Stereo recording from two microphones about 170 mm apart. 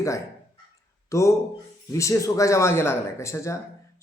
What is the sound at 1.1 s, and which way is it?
A man's voice, 20° left (ahead or behind).